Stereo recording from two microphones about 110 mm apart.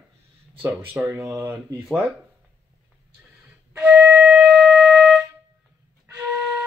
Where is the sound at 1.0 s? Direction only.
25° right (ahead or behind).